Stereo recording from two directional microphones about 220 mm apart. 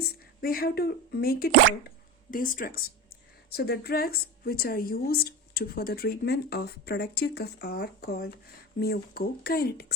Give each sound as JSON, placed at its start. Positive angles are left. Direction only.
{"t": 0.4, "sound": "a woman's voice", "side_deg": 45}